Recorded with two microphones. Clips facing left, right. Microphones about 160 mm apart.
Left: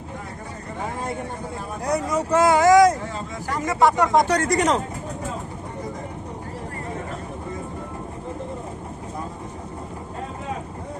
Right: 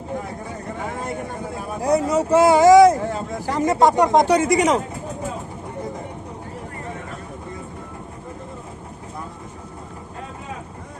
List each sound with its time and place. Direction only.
1.9 s speech: 25° right (ahead or behind)
4.4 s speech: centre (ahead or behind)